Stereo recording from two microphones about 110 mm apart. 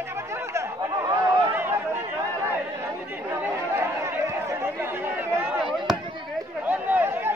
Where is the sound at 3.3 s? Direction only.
25° right (ahead or behind).